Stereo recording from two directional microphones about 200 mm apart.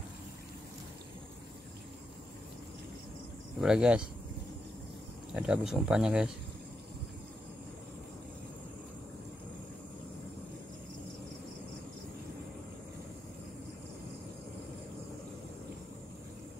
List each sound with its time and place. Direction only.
3.5 s speech: 5° right (ahead or behind)
5.3 s speech: 5° right (ahead or behind)